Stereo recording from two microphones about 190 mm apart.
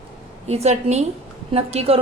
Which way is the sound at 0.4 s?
35° right (ahead or behind).